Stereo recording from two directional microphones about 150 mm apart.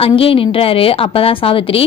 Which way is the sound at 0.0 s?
40° left (ahead or behind).